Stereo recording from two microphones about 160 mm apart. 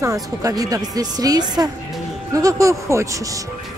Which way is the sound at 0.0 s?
20° right (ahead or behind).